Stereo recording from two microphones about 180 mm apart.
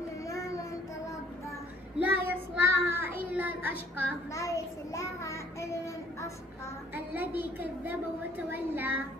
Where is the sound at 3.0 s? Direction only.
10° right (ahead or behind).